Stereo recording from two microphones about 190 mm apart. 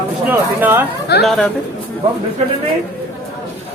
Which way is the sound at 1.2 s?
5° left (ahead or behind).